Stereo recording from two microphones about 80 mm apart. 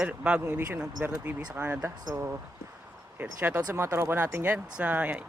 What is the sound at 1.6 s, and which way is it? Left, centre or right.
Speech, right.